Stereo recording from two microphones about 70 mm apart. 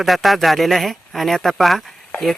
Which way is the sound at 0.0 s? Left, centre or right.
Centre.